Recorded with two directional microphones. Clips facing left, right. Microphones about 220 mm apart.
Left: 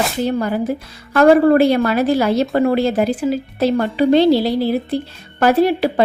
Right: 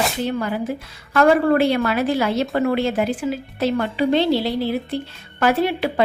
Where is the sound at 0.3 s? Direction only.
40° left (ahead or behind).